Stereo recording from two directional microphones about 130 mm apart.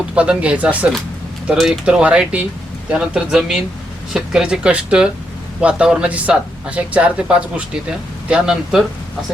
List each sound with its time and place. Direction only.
0.1 s speech: 10° right (ahead or behind)